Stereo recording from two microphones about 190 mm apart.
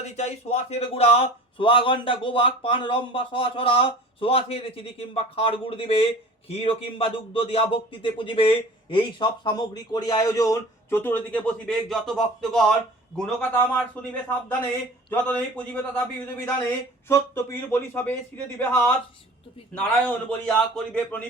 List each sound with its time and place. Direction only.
0.0 s a man's voice: 35° left (ahead or behind); by 15.8 s 5° left (ahead or behind)
17.1 s a man's voice: 15° left (ahead or behind)